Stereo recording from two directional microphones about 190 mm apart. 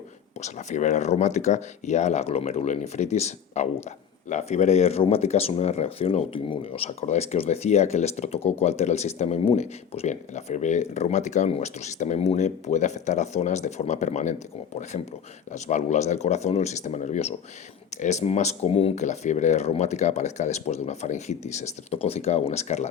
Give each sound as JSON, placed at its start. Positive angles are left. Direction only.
{"t": 0.4, "sound": "speech", "side_deg": 40}